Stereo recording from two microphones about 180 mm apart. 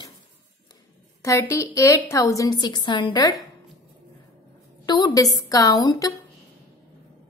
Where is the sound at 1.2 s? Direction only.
15° left (ahead or behind).